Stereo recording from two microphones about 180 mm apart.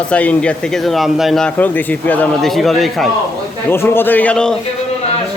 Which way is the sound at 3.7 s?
10° left (ahead or behind).